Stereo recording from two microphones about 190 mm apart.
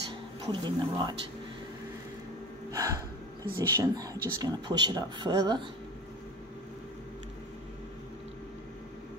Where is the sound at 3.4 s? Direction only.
20° right (ahead or behind).